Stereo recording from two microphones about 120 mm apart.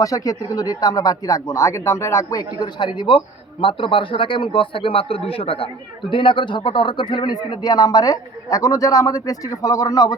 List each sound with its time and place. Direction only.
0.0 s speech: 30° left (ahead or behind)